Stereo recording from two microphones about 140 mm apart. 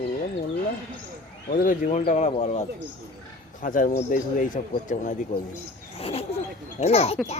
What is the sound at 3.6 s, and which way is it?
Speech, 70° left (ahead or behind).